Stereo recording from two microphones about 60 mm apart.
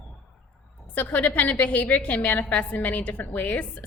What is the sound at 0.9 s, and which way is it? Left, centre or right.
A woman's voice, left.